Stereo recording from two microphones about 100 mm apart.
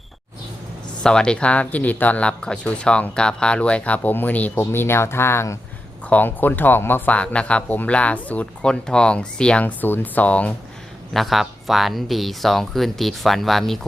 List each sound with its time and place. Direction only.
1.0 s speech: 10° left (ahead or behind)
11.1 s speech: centre (ahead or behind)